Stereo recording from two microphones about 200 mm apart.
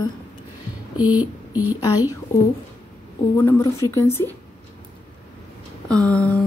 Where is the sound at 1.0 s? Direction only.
10° right (ahead or behind).